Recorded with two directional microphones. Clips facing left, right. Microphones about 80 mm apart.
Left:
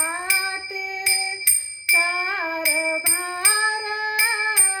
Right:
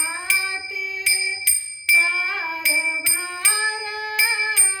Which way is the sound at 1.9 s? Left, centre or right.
Left.